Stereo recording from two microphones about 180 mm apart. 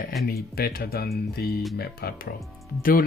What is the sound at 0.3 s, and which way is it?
Speech, 55° left (ahead or behind).